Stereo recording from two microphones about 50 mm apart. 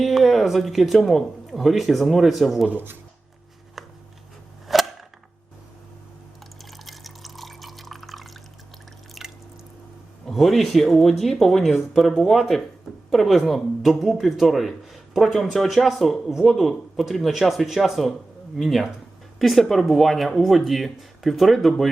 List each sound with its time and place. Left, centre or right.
0.0 s speech: centre
2.6 s speech: right
4.7 s cap gun: centre
6.7 s water: centre
9.2 s drip: centre
10.2 s speech: centre